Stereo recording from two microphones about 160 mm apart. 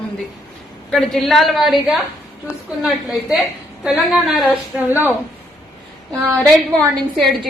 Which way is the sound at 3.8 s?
5° right (ahead or behind).